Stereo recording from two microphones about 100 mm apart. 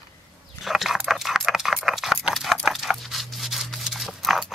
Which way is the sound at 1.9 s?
5° right (ahead or behind).